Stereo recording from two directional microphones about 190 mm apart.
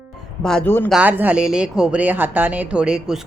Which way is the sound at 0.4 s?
5° left (ahead or behind).